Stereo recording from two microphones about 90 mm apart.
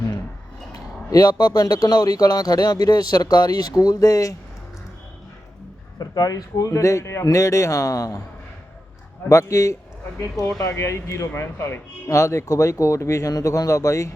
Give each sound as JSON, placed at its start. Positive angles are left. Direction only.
{"t": 1.1, "sound": "speech", "side_deg": 45}
{"t": 6.0, "sound": "speech", "side_deg": 45}
{"t": 9.3, "sound": "speech", "side_deg": 35}